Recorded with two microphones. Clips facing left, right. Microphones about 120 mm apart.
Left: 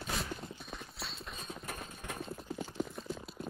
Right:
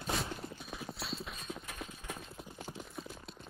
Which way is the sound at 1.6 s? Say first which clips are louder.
Left 2 dB; 45° left (ahead or behind).